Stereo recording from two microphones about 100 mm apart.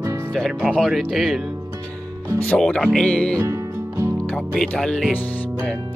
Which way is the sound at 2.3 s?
10° left (ahead or behind).